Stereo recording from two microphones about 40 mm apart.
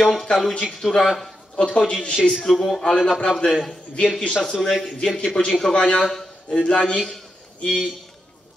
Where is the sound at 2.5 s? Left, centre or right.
Centre; by 4.3 s left.